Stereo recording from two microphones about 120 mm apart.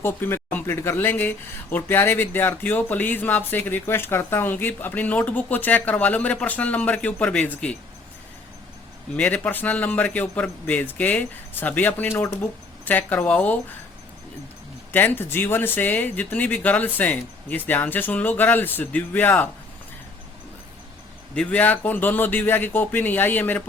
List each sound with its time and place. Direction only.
0.0 s speech: 20° left (ahead or behind)
9.1 s speech: 10° left (ahead or behind)
14.9 s speech: 15° left (ahead or behind)
21.3 s speech: 10° left (ahead or behind)